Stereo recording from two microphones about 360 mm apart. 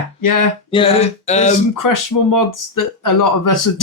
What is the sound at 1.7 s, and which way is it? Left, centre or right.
Speech, left.